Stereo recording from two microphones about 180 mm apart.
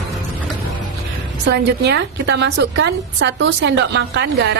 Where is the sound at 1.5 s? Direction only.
70° right (ahead or behind).